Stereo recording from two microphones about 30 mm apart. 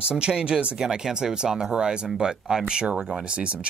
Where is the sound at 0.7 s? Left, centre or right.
Centre.